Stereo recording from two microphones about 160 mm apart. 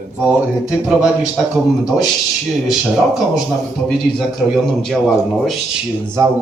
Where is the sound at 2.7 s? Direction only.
Centre (ahead or behind).